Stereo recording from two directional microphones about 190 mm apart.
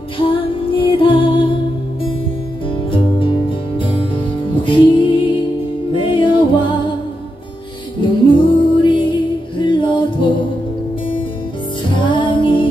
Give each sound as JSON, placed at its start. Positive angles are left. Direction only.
{"t": 0.2, "sound": "music", "side_deg": 30}
{"t": 2.9, "sound": "music", "side_deg": 25}
{"t": 8.0, "sound": "music", "side_deg": 25}
{"t": 11.9, "sound": "music", "side_deg": 25}